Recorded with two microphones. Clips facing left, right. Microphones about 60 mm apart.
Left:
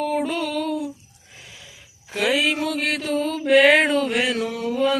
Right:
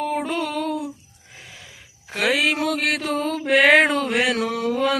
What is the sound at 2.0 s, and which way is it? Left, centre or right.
Mantra, right.